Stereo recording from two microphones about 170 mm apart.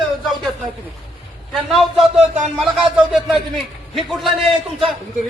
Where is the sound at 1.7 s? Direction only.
Centre (ahead or behind).